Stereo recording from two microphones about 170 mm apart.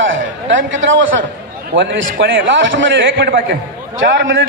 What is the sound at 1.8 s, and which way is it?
A man's voice, 90° right.